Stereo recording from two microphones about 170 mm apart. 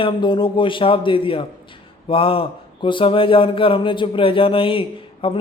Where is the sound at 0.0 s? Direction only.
30° left (ahead or behind).